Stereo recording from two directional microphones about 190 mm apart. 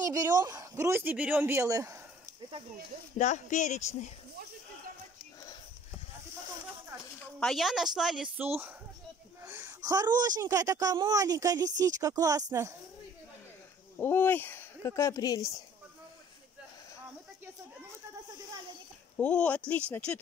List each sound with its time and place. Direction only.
0.0 s speech: 20° right (ahead or behind)
3.2 s speech: 40° left (ahead or behind)
7.3 s a woman's voice: centre (ahead or behind)
9.4 s a sound: 10° right (ahead or behind)
9.8 s a woman's voice: 20° right (ahead or behind)
13.9 s speech: 10° left (ahead or behind)
19.1 s a woman's voice: 5° left (ahead or behind)